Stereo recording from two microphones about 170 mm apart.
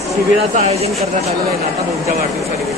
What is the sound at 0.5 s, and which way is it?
Speech, 40° right (ahead or behind).